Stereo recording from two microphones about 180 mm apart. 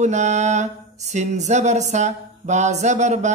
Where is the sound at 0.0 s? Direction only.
40° right (ahead or behind).